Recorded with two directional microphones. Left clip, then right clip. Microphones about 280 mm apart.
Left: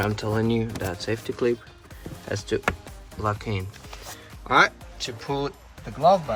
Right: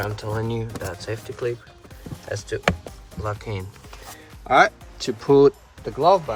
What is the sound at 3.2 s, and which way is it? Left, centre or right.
Speech, centre.